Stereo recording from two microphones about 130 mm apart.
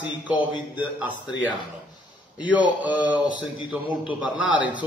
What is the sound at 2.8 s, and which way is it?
Speech, 10° right (ahead or behind).